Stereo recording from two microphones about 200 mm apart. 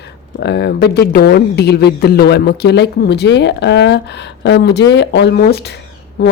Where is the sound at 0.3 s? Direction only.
55° left (ahead or behind).